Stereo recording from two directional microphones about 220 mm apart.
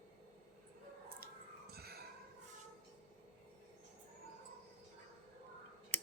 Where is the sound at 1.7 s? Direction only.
45° right (ahead or behind).